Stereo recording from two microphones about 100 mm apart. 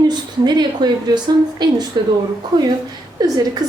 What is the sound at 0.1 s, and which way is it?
A woman's voice, 45° right (ahead or behind).